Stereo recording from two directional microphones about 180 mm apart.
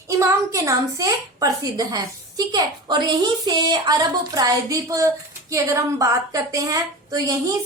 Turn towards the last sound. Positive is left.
turn(degrees=-20)  # may be behind; listen again after turning